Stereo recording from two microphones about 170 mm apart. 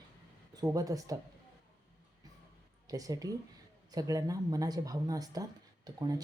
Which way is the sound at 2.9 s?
20° right (ahead or behind).